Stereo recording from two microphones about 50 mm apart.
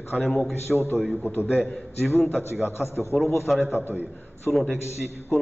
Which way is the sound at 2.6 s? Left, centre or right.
Left.